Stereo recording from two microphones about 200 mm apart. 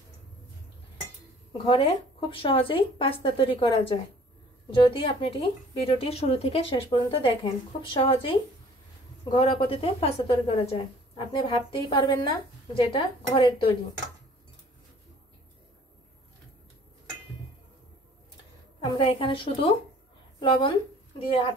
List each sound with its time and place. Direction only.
1.7 s speech: 25° left (ahead or behind)
18.9 s a woman's voice: 25° left (ahead or behind)